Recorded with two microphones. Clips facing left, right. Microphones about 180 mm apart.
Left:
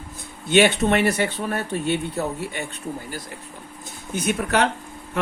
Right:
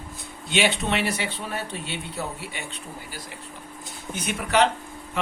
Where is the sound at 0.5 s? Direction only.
50° left (ahead or behind).